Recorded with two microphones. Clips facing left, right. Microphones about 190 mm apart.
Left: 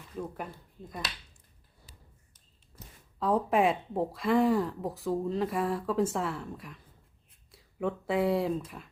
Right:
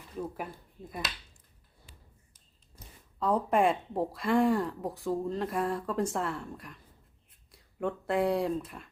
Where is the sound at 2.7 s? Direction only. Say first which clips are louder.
Even; centre (ahead or behind).